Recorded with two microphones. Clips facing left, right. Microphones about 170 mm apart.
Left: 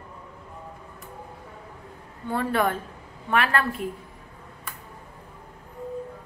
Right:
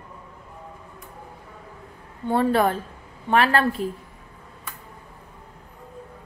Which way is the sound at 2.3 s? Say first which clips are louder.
Right 4 dB; 30° right (ahead or behind).